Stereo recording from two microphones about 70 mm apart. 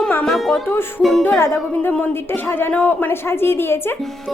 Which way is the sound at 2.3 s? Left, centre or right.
Left.